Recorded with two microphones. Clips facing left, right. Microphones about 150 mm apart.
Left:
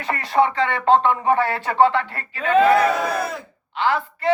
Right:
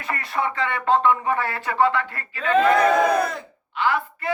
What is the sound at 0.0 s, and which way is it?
A man's voice, 30° left (ahead or behind).